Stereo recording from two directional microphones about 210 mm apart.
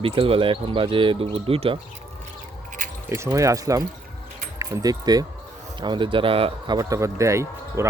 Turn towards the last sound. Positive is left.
turn(degrees=-15)  # may be behind; listen again after turning